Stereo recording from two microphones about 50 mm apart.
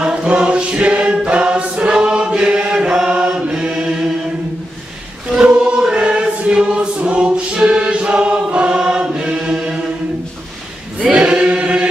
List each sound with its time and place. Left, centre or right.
0.0 s choir: centre
3.3 s chant: centre
5.3 s choir: centre
11.1 s choir: centre